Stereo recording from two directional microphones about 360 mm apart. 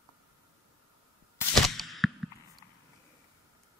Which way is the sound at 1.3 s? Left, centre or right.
Centre.